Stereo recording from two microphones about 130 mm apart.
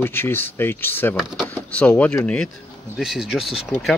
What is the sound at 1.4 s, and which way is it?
Speech, 10° left (ahead or behind).